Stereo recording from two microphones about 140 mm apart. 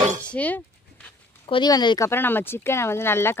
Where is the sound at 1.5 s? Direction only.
30° left (ahead or behind).